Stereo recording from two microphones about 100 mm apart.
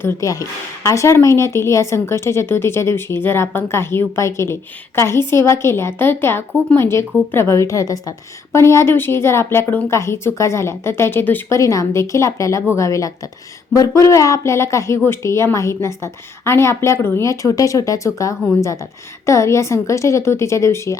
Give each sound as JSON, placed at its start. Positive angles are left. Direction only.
{"t": 0.0, "sound": "a woman's voice", "side_deg": 30}